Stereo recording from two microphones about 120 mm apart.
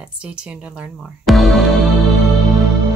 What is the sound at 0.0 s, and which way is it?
Speech, 10° right (ahead or behind).